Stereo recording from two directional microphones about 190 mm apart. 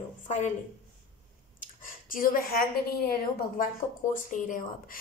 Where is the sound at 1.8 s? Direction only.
50° left (ahead or behind).